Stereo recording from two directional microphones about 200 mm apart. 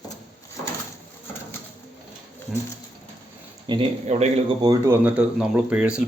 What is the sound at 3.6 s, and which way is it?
Speech, 25° right (ahead or behind).